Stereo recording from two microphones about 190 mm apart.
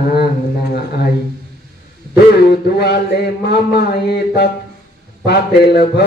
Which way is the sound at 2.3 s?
60° left (ahead or behind).